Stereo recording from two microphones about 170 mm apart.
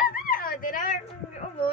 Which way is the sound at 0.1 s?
55° left (ahead or behind).